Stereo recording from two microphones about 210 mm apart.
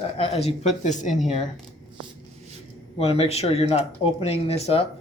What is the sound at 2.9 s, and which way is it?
Speech, 30° left (ahead or behind).